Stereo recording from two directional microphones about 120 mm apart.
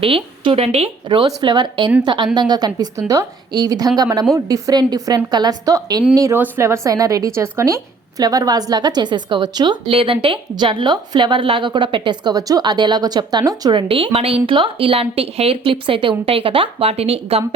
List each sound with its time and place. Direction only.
0.0 s a woman's voice: 50° right (ahead or behind)